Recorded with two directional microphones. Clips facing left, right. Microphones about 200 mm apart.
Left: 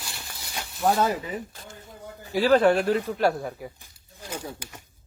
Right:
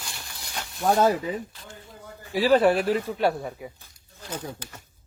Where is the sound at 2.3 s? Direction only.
5° right (ahead or behind).